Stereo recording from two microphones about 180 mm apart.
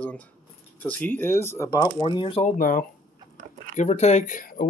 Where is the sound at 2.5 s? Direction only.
50° left (ahead or behind).